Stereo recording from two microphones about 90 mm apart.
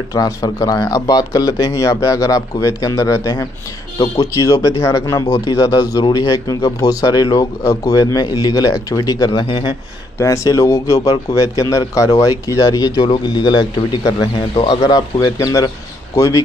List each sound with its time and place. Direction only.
0.1 s speech: 45° left (ahead or behind)
10.1 s speech: 35° left (ahead or behind)
13.0 s a man's voice: 55° left (ahead or behind)
14.8 s speech: 45° left (ahead or behind)
15.3 s speech: 40° left (ahead or behind)